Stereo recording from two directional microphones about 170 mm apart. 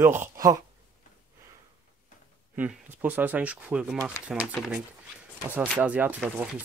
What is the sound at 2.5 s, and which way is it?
Speech, 10° right (ahead or behind).